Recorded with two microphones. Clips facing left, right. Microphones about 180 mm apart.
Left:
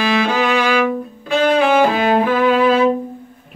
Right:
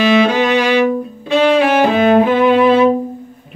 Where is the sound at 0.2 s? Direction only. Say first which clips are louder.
Right 4 dB; 20° right (ahead or behind).